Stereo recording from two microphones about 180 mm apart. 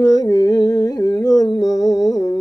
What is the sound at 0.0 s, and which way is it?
Humming, 20° left (ahead or behind).